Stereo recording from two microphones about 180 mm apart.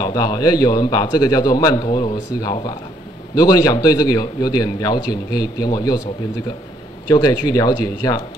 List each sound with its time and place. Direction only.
0.0 s a man's voice: 20° left (ahead or behind)
7.1 s a man's voice: 25° left (ahead or behind)